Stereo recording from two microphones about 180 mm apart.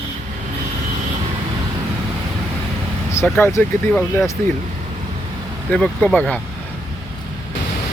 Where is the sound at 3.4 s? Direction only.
10° left (ahead or behind).